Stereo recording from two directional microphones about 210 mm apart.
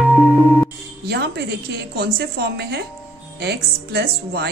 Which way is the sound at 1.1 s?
50° right (ahead or behind).